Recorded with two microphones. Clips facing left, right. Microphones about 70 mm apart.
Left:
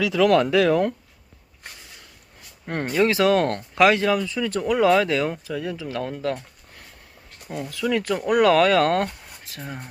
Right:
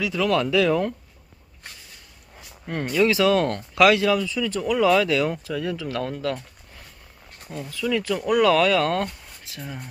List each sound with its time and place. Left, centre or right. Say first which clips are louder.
0.0 s speech: left 5 dB; left
0.3 s speech: left 2 dB; left
2.6 s speech: even; left
5.3 s speech: right 1 dB; centre
7.5 s speech: left 1 dB; left